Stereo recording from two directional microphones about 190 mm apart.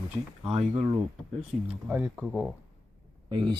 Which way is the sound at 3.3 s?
25° right (ahead or behind).